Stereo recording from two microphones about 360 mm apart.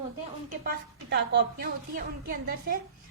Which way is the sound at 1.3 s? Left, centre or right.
Right.